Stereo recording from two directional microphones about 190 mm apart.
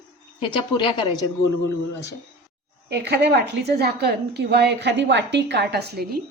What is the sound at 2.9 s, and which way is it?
A woman's voice, 60° right (ahead or behind).